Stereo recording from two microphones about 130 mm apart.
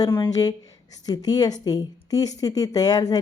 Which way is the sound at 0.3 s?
30° left (ahead or behind).